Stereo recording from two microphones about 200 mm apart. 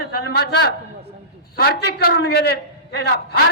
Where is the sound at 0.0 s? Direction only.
55° left (ahead or behind).